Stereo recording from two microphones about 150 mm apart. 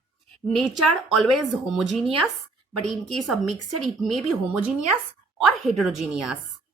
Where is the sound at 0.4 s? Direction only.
Centre (ahead or behind).